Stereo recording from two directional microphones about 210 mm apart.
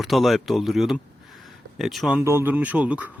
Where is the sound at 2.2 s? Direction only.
10° right (ahead or behind).